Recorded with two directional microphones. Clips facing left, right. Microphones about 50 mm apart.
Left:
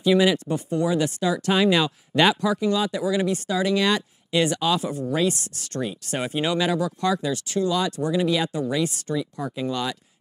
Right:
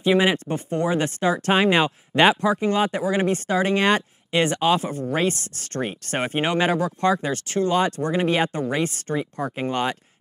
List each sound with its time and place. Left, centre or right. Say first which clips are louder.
0.0 s speech: even; right